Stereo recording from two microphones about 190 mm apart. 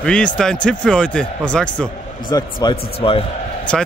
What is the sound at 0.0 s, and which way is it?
Speech, 5° left (ahead or behind).